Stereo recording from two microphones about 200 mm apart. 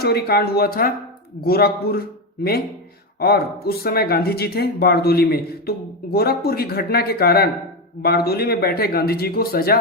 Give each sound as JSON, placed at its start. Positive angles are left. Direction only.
{"t": 0.0, "sound": "speech", "side_deg": 50}